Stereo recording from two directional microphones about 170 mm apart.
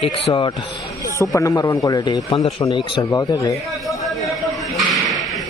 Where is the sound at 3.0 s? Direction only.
20° left (ahead or behind).